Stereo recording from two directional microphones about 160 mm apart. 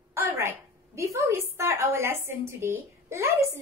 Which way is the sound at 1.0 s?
20° right (ahead or behind).